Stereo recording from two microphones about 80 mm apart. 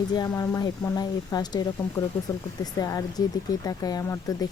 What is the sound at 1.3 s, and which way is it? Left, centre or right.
Speech, left.